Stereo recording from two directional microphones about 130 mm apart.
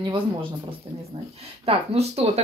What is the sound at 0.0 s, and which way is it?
Speech, 40° right (ahead or behind).